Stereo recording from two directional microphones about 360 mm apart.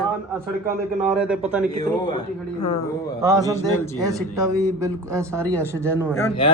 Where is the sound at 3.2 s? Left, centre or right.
Centre.